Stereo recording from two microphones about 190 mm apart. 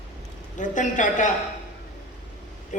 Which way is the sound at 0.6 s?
40° left (ahead or behind).